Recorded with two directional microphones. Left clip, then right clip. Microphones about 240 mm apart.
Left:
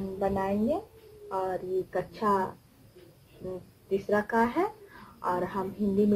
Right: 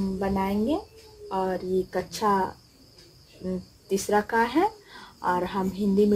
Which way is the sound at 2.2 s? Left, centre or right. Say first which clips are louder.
Right 3 dB; right.